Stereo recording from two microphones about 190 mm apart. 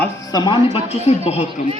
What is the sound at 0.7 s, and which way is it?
Speech, 35° left (ahead or behind).